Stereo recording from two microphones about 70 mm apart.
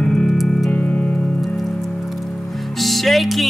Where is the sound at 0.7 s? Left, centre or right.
Centre.